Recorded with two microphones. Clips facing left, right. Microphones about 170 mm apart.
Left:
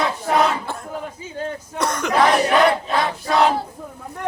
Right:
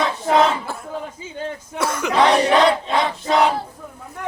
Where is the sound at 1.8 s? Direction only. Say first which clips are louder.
Even; 5° right (ahead or behind).